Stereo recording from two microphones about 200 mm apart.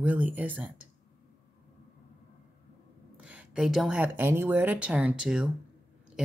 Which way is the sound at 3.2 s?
5° right (ahead or behind).